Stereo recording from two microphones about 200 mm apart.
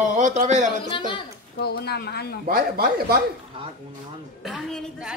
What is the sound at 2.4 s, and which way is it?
Speech, 50° right (ahead or behind).